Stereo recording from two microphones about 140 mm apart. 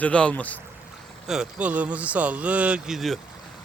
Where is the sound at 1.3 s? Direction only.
5° right (ahead or behind).